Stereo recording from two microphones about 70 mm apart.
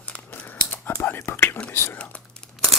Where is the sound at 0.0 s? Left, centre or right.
Left.